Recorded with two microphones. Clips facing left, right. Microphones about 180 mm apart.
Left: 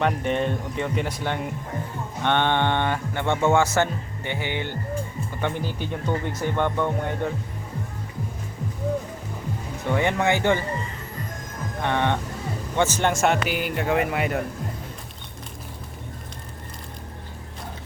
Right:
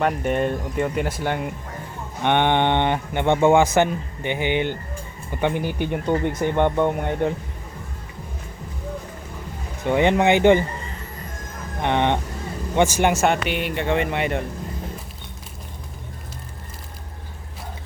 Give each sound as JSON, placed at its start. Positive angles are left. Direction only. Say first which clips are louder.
{"t": 0.0, "sound": "speech", "louder": "right 2 dB", "side_deg": -5}
{"t": 9.8, "sound": "speech", "louder": "right 5 dB", "side_deg": -20}
{"t": 11.8, "sound": "speech", "louder": "right 3 dB", "side_deg": -20}
{"t": 13.2, "sound": "speech", "louder": "right 1 dB", "side_deg": 0}